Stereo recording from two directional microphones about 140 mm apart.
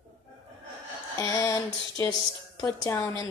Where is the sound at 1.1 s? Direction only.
20° left (ahead or behind).